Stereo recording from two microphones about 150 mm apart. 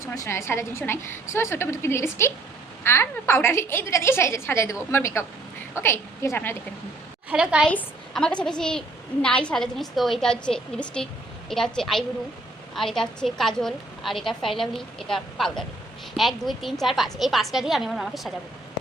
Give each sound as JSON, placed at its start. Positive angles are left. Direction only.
{"t": 0.0, "sound": "a woman's voice", "side_deg": 20}
{"t": 7.3, "sound": "a woman's voice", "side_deg": -5}
{"t": 7.7, "sound": "a woman's voice", "side_deg": 10}